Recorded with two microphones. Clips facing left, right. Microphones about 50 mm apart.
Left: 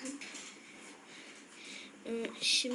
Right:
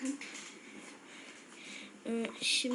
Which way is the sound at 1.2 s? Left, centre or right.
Centre.